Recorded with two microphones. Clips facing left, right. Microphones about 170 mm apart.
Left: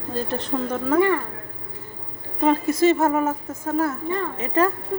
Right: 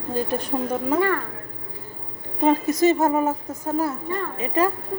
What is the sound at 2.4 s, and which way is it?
A woman's voice, 20° right (ahead or behind).